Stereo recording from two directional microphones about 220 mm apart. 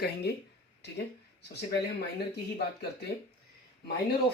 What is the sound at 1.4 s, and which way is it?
Speech, 50° left (ahead or behind).